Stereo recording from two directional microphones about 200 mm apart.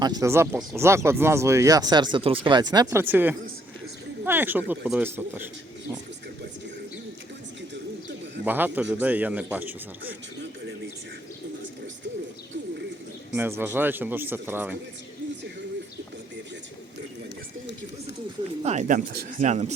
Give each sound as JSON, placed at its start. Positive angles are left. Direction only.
{"t": 0.0, "sound": "speech", "side_deg": -15}
{"t": 8.4, "sound": "speech", "side_deg": -10}
{"t": 13.3, "sound": "speech", "side_deg": -10}
{"t": 18.6, "sound": "speech", "side_deg": -35}